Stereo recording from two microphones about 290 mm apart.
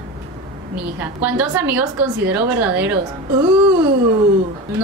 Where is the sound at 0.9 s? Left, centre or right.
Centre.